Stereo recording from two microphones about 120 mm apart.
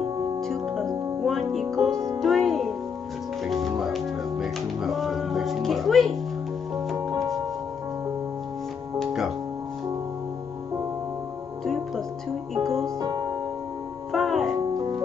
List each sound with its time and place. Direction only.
0.4 s music: 5° left (ahead or behind)
9.0 s music: centre (ahead or behind)
11.6 s music: centre (ahead or behind)
13.0 s music: 35° right (ahead or behind)
14.1 s music: centre (ahead or behind)
14.7 s music: 30° right (ahead or behind)